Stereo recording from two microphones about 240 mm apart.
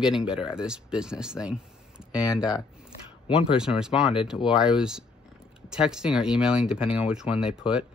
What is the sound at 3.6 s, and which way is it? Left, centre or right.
Speech, centre.